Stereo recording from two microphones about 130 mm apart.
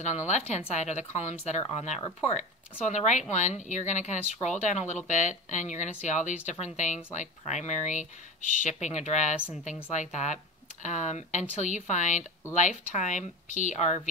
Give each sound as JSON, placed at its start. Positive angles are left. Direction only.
{"t": 0.3, "sound": "speech", "side_deg": 60}
{"t": 2.9, "sound": "speech", "side_deg": 65}